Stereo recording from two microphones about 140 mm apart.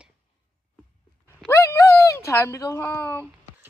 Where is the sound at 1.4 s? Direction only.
20° left (ahead or behind).